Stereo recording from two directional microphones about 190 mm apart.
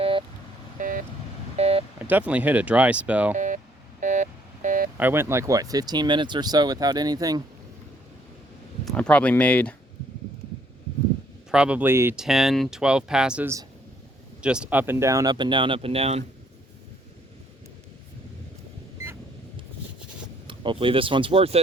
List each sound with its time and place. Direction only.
0.0 s vehicle: 25° right (ahead or behind)
0.8 s vehicle: 45° right (ahead or behind)
1.5 s telephone dialing: 35° right (ahead or behind)
2.0 s speech: 10° right (ahead or behind)
3.3 s a sound: 40° right (ahead or behind)
4.0 s telephone dialing: 40° right (ahead or behind)
4.9 s speech: 10° right (ahead or behind)
8.8 s speech: 5° left (ahead or behind)
11.5 s speech: 5° right (ahead or behind)
12.2 s speech: centre (ahead or behind); by 16.2 s 30° right (ahead or behind)
20.5 s speech: 25° right (ahead or behind)